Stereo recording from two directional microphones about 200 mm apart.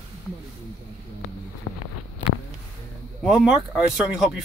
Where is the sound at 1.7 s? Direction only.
30° left (ahead or behind).